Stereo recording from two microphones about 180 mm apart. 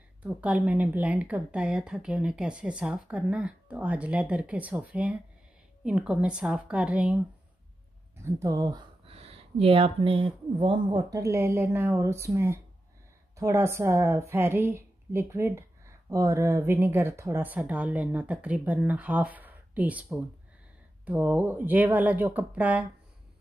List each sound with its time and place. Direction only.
0.2 s speech: 10° right (ahead or behind)
8.2 s speech: 15° right (ahead or behind)